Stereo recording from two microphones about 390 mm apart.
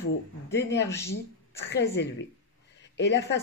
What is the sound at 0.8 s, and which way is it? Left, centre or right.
Speech, centre.